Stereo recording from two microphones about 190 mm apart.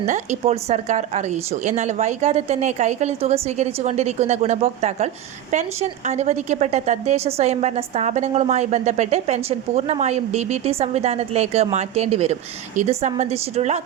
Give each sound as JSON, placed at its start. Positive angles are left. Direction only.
{"t": 0.0, "sound": "speech", "side_deg": -40}